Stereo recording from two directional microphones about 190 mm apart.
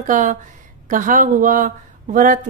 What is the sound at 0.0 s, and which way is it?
Speech, 40° right (ahead or behind).